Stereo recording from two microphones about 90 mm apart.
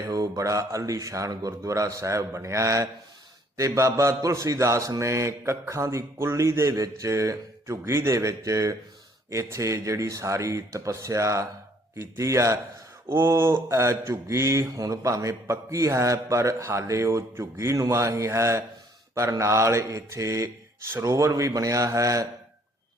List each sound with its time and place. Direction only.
0.0 s speech: 40° right (ahead or behind)